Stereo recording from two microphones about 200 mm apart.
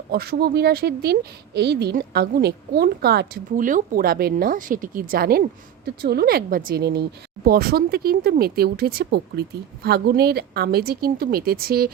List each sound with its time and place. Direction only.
0.1 s speech: 50° right (ahead or behind)
3.5 s speech: 40° right (ahead or behind)